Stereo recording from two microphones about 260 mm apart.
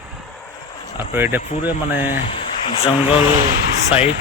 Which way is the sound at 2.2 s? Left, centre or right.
Left.